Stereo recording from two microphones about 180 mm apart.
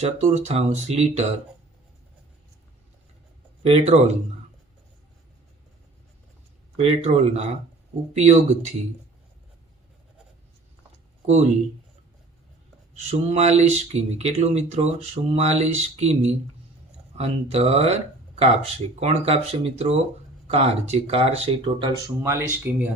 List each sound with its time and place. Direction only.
0.0 s speech: 40° right (ahead or behind)
3.6 s speech: 35° right (ahead or behind)
6.7 s speech: 35° right (ahead or behind)
13.1 s speech: 35° right (ahead or behind)
22.2 s speech: 15° right (ahead or behind)